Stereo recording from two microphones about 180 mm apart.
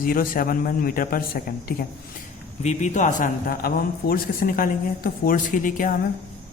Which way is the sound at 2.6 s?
40° left (ahead or behind).